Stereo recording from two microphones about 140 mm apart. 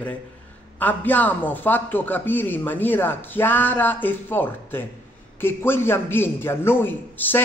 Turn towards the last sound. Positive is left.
turn(degrees=15)  # may be behind; listen again after turning